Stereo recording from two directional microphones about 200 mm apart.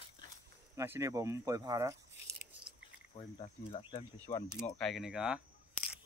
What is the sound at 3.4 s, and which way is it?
Speech, 25° left (ahead or behind).